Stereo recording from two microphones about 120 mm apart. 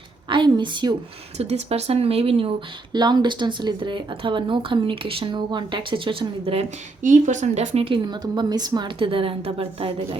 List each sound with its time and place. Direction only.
0.3 s a sound: 40° right (ahead or behind)
1.4 s speech: 60° right (ahead or behind)
2.9 s speech: 35° right (ahead or behind); by 6.7 s 50° right (ahead or behind)
7.0 s a woman's voice: 90° right; by 7.9 s 75° right (ahead or behind)
7.9 s speech: 40° right (ahead or behind)